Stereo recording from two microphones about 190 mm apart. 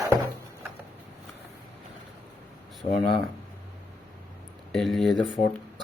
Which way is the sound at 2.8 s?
45° left (ahead or behind).